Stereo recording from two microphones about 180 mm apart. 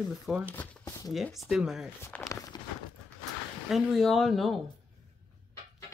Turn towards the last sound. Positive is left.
turn(degrees=0)  # may be behind; listen again after turning